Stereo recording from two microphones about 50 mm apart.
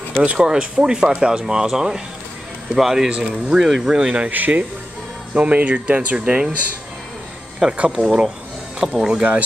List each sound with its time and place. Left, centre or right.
0.2 s speech: right
0.5 s speech: centre
4.3 s speech: right
7.7 s speech: right
8.8 s speech: centre
9.1 s speech: right